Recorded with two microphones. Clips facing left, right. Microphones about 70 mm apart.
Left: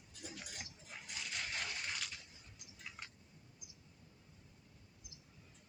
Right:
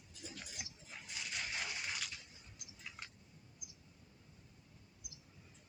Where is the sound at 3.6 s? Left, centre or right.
Left.